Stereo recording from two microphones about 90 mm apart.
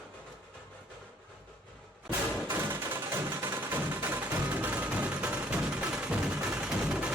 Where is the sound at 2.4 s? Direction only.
25° right (ahead or behind).